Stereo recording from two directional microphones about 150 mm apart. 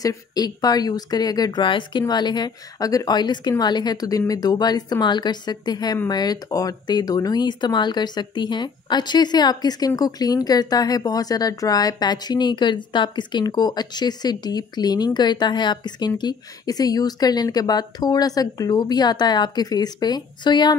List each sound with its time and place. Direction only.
0.0 s speech: 25° left (ahead or behind)